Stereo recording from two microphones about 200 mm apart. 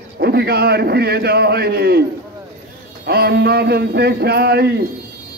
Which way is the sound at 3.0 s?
55° right (ahead or behind).